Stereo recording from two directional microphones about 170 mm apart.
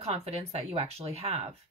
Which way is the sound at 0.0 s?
40° right (ahead or behind).